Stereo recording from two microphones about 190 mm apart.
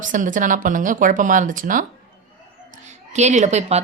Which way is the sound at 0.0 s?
45° right (ahead or behind).